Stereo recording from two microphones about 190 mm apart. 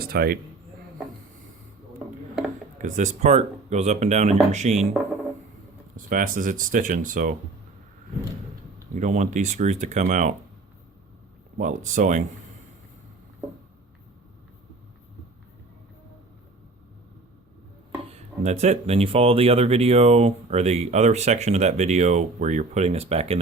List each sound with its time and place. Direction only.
0.0 s a man's voice: 50° right (ahead or behind)
2.7 s speech: 40° right (ahead or behind)
6.1 s speech: 45° right (ahead or behind)
9.0 s speech: 40° right (ahead or behind)
11.5 s speech: 40° right (ahead or behind)
18.4 s speech: 35° right (ahead or behind)